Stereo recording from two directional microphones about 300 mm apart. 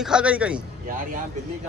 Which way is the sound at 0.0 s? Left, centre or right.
Centre.